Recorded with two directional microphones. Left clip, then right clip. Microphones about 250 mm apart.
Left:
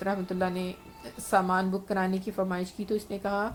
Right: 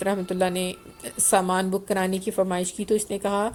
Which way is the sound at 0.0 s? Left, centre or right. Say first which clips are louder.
Right 6 dB; right.